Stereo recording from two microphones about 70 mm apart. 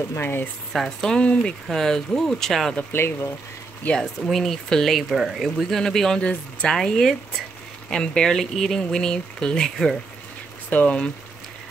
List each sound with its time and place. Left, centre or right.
0.2 s speech: left
0.7 s speech: centre
2.9 s speech: left
4.0 s speech: centre
10.7 s speech: centre